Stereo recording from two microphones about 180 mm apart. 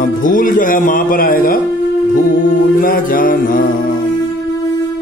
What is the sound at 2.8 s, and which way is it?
Music, 50° left (ahead or behind).